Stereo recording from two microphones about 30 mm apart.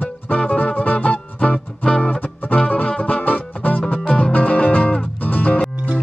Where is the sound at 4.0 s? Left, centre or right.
Left.